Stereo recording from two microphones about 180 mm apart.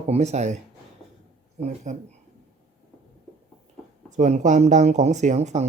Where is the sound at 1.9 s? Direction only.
40° right (ahead or behind).